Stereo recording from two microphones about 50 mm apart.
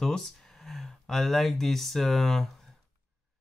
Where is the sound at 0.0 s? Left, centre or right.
Centre.